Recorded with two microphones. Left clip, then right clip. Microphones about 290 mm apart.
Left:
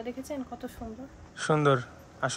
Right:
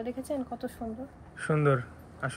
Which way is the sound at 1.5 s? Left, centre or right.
Centre.